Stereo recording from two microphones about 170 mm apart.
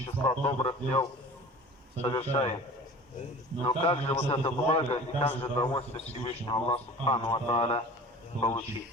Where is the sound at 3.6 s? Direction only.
35° left (ahead or behind).